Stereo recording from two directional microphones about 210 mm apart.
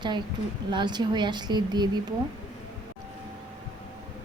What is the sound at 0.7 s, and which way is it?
A woman's voice, 20° right (ahead or behind).